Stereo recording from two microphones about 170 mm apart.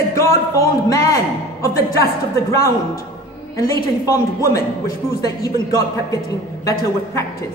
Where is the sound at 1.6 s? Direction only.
20° left (ahead or behind).